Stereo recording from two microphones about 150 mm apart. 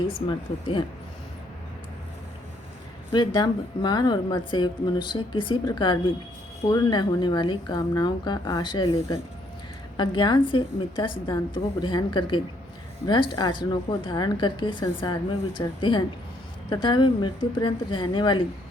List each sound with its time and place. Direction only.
0.3 s a woman's voice: 35° left (ahead or behind)
3.1 s a woman's voice: 30° left (ahead or behind)